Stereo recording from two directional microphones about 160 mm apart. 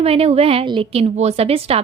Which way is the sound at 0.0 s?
40° right (ahead or behind).